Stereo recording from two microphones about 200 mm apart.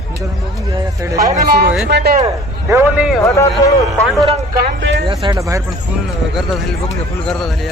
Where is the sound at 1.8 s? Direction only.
55° right (ahead or behind).